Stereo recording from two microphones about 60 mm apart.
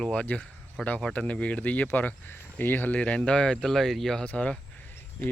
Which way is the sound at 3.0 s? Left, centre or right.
Centre.